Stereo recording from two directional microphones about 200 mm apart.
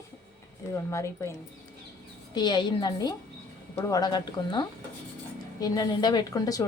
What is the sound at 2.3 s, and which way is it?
A woman's voice, 20° left (ahead or behind).